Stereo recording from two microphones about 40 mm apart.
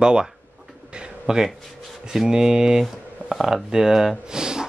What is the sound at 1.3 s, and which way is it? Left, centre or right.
Speech, centre.